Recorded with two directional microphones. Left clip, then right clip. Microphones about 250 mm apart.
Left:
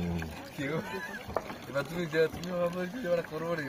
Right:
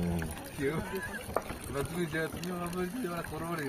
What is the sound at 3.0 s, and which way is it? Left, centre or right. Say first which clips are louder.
Speech: left 6 dB; left.